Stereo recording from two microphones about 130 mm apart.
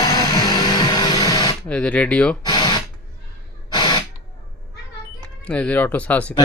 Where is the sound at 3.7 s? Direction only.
35° left (ahead or behind).